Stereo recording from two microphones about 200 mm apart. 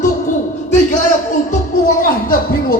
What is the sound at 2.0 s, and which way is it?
Speech, 45° left (ahead or behind).